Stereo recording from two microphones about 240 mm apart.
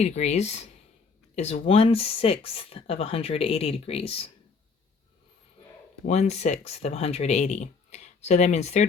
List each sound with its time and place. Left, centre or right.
0.0 s speech: left
6.1 s speech: left